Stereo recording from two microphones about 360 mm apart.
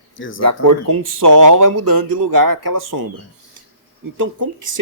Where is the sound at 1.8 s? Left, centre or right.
Right.